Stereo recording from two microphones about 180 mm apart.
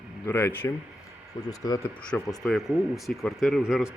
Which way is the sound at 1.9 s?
5° left (ahead or behind).